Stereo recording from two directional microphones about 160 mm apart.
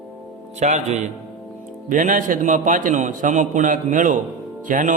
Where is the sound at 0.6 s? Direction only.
45° right (ahead or behind).